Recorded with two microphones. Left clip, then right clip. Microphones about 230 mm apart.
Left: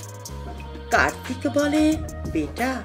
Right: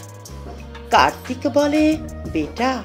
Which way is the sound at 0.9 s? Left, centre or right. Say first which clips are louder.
Right 5 dB; centre.